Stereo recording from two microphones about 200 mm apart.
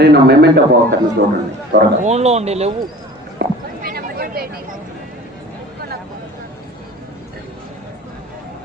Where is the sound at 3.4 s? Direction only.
55° right (ahead or behind).